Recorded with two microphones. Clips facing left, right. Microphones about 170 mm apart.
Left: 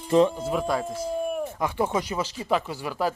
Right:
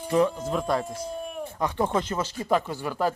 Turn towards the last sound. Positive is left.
turn(degrees=5)  # may be behind; listen again after turning